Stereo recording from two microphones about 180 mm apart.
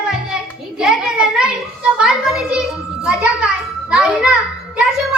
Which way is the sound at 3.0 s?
5° right (ahead or behind).